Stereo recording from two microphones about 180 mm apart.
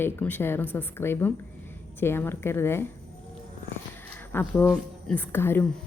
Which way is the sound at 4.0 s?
10° left (ahead or behind).